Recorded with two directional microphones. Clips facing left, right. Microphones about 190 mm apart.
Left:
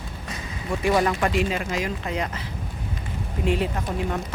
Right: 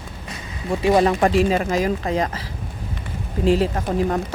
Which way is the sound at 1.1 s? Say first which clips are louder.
Right 6 dB; 40° right (ahead or behind).